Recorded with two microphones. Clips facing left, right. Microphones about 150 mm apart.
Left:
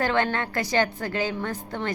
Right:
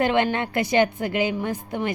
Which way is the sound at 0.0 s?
20° right (ahead or behind).